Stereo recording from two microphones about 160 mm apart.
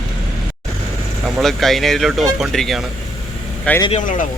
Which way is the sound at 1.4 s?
Centre (ahead or behind).